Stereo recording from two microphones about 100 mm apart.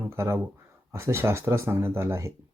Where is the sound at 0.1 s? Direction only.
25° right (ahead or behind).